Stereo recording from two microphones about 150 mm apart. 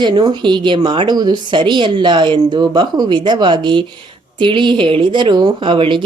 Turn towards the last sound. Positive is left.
turn(degrees=-35)  # may be behind; listen again after turning